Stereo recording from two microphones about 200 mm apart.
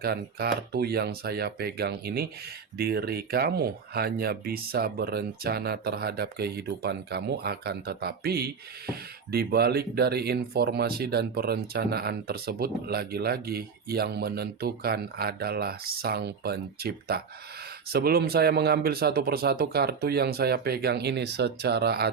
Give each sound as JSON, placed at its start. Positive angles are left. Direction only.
{"t": 0.0, "sound": "speech", "side_deg": -50}